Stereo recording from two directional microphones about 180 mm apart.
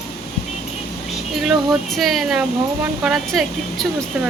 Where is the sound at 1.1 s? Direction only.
Centre (ahead or behind).